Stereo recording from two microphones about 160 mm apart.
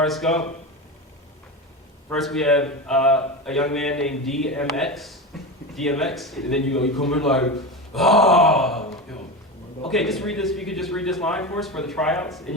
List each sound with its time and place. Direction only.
0.0 s speech: centre (ahead or behind)
2.1 s speech: centre (ahead or behind)
9.9 s speech: centre (ahead or behind)